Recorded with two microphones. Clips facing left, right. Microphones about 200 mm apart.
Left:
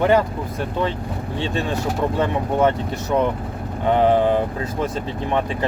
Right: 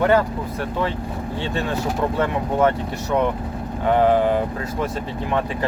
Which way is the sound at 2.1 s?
20° left (ahead or behind).